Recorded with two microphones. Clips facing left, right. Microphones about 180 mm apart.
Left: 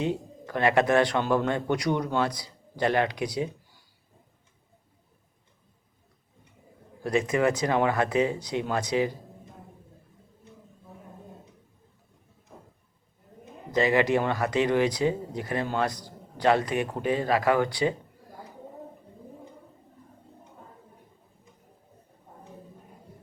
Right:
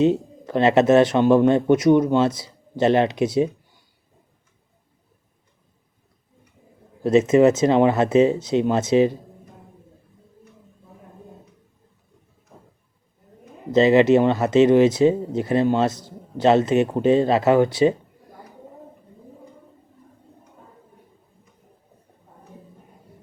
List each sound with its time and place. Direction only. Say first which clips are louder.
0.0 s speech: right 10 dB; 20° right (ahead or behind)
7.0 s speech: right 10 dB; 25° right (ahead or behind)
13.7 s speech: right 9 dB; 25° right (ahead or behind)